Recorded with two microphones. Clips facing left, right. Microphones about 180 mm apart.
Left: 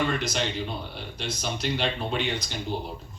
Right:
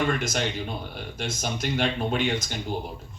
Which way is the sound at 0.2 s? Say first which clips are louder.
Right 1 dB; 50° right (ahead or behind).